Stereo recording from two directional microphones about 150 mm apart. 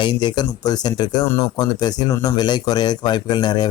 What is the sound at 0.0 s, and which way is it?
A man's voice, 30° left (ahead or behind).